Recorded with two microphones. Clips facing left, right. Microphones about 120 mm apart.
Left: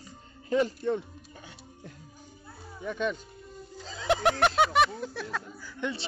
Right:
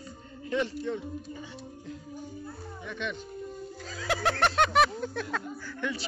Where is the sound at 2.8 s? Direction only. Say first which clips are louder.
Left 6 dB; 40° left (ahead or behind).